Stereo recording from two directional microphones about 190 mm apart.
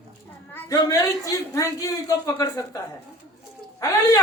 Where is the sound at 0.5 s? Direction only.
15° left (ahead or behind).